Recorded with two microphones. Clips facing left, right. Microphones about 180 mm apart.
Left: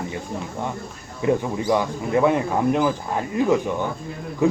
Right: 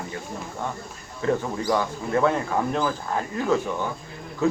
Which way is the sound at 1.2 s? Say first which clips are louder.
Left 3 dB; 15° left (ahead or behind).